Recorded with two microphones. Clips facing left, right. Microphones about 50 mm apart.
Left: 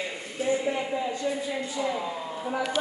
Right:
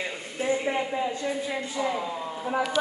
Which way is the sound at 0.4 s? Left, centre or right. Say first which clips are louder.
Even; right.